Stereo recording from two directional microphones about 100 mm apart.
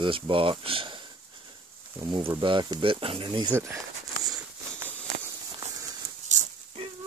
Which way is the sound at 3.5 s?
25° right (ahead or behind).